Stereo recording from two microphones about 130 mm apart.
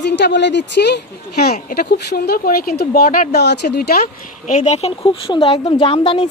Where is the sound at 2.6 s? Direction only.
90° left.